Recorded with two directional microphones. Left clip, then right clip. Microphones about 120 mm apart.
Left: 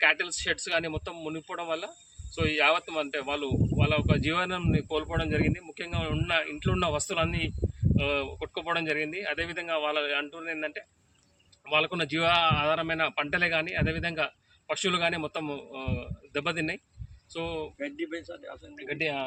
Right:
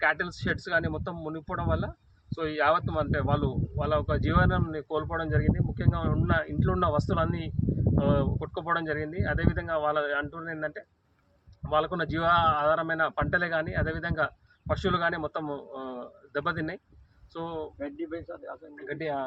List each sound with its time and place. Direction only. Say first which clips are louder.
0.0 s speech: left 2 dB; 40° left (ahead or behind)
17.8 s speech: left 1 dB; 5° left (ahead or behind)
18.9 s speech: left 1 dB; 45° left (ahead or behind)